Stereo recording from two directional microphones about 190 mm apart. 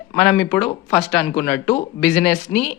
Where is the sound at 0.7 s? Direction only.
15° left (ahead or behind).